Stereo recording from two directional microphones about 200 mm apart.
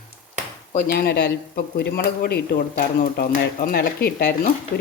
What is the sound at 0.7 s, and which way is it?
Speech, 45° left (ahead or behind).